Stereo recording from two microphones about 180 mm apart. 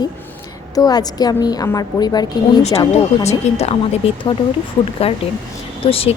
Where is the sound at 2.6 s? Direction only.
35° left (ahead or behind).